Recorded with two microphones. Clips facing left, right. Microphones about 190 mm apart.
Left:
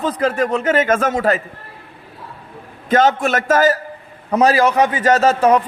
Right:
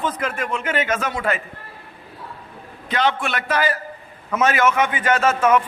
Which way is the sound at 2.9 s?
45° left (ahead or behind).